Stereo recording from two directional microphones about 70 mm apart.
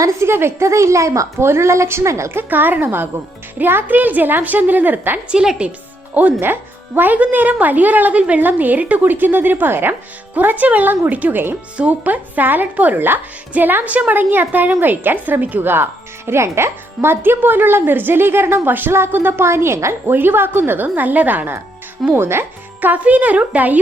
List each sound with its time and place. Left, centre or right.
0.0 s a woman's voice: right
2.4 s a woman's voice: right
5.3 s speech: centre
6.4 s a woman's voice: right
22.1 s a woman's voice: right
22.8 s a woman's voice: right